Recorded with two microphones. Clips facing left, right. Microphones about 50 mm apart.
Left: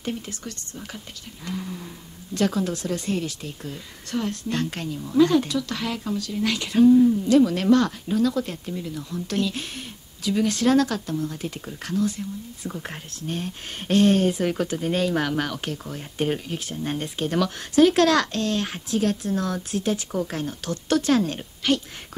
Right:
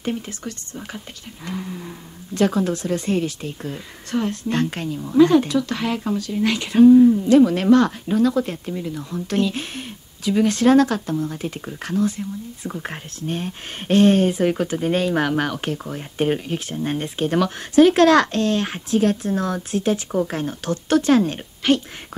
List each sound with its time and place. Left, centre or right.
0.0 s speech: right